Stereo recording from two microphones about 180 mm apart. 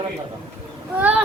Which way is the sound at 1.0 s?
5° right (ahead or behind).